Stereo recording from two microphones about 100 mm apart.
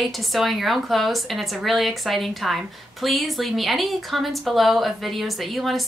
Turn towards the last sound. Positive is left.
turn(degrees=0)  # may be behind; listen again after turning